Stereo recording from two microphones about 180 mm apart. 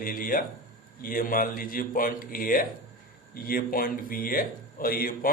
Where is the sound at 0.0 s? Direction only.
50° left (ahead or behind).